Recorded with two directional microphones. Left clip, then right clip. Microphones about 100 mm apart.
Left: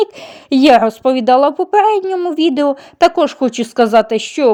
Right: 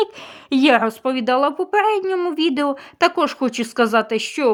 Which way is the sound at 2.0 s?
Centre (ahead or behind).